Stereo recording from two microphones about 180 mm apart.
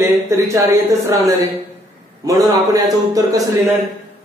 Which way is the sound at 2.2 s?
20° right (ahead or behind).